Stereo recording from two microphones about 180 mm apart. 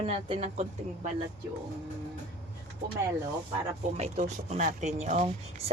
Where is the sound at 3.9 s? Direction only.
40° right (ahead or behind).